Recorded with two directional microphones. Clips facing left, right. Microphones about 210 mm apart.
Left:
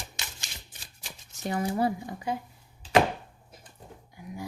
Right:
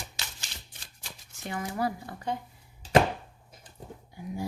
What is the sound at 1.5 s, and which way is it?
Speech, 30° left (ahead or behind).